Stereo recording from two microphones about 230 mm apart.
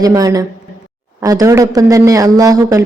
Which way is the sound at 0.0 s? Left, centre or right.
Centre.